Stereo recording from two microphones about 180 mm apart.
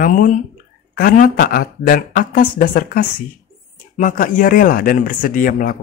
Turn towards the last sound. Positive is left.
turn(degrees=50)  # may be behind; listen again after turning